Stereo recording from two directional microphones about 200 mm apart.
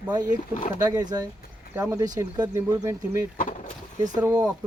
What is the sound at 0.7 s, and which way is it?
Speech, 20° right (ahead or behind).